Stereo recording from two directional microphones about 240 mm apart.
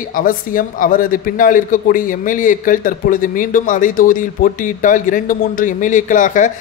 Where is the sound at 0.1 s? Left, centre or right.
Left.